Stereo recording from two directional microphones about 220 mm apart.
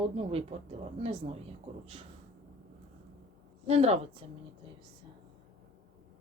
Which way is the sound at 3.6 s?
30° right (ahead or behind).